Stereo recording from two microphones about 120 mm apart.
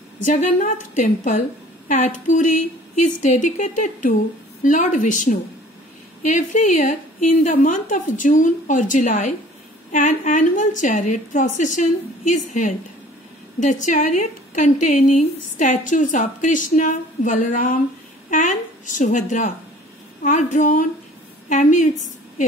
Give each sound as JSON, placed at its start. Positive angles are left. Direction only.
{"t": 0.2, "sound": "a woman's voice", "side_deg": 90}